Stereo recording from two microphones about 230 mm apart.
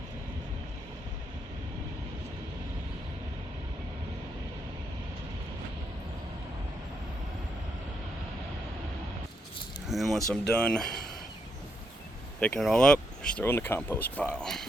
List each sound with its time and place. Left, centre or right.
9.9 s speech: centre
12.4 s speech: centre